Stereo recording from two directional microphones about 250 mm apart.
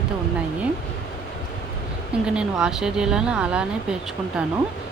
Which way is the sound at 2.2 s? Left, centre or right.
Centre.